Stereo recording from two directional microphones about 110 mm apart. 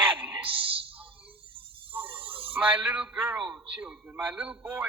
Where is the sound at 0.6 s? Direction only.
55° right (ahead or behind).